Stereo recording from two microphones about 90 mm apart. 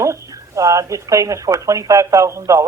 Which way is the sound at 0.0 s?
35° right (ahead or behind).